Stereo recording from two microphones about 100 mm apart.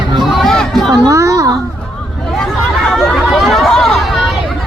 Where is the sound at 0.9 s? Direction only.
35° right (ahead or behind).